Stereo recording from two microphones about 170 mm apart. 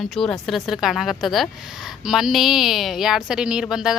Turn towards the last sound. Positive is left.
turn(degrees=-5)  # may be behind; listen again after turning